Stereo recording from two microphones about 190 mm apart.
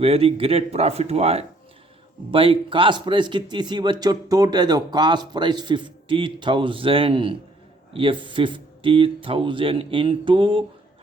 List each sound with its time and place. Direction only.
0.0 s a man's voice: 30° right (ahead or behind)